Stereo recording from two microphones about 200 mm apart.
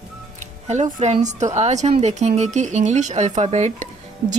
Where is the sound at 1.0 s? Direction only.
35° right (ahead or behind).